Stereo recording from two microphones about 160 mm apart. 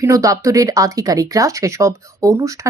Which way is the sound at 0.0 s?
20° right (ahead or behind).